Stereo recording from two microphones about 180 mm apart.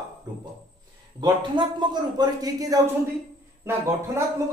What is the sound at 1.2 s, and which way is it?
A man's voice, 25° right (ahead or behind).